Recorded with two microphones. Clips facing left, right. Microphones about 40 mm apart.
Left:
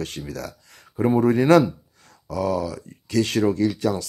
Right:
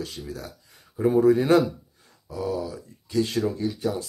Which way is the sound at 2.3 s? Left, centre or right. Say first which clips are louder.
Left 5 dB; left.